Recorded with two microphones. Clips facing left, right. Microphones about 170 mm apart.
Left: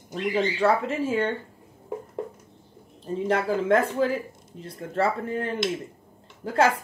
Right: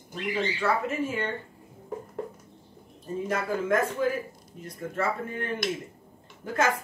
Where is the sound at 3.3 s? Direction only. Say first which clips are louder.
Left 5 dB; 30° left (ahead or behind).